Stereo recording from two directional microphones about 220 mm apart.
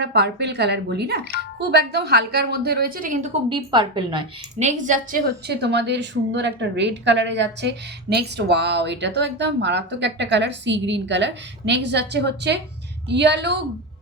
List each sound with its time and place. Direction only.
0.0 s a woman's voice: 50° right (ahead or behind)
3.5 s a woman's voice: 20° right (ahead or behind)
4.6 s a woman's voice: 35° right (ahead or behind); by 13.6 s 55° right (ahead or behind)